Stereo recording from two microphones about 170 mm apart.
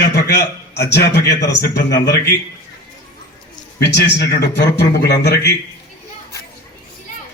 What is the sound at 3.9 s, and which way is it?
A man's voice, 85° left.